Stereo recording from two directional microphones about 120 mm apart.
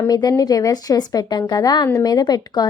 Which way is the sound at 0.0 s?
35° left (ahead or behind).